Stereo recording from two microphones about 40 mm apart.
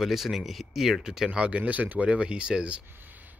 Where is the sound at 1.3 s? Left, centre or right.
Right.